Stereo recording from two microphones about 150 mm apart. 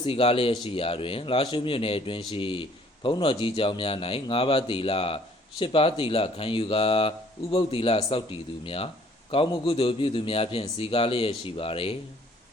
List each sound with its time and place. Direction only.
0.0 s a man's voice: 35° left (ahead or behind)